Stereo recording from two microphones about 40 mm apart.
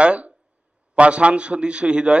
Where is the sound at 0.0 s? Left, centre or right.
Right.